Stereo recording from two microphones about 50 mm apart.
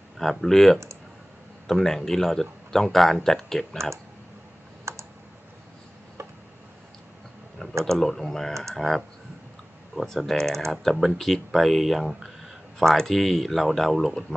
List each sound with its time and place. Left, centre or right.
0.2 s speech: centre
4.9 s computer keyboard: right
7.8 s speech: centre